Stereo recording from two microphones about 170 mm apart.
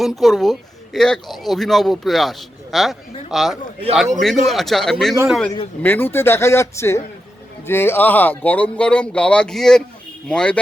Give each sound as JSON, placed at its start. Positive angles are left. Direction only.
{"t": 0.0, "sound": "speech", "side_deg": 0}